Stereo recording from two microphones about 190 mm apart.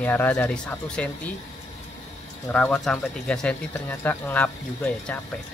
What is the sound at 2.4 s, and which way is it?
Speech, 5° left (ahead or behind).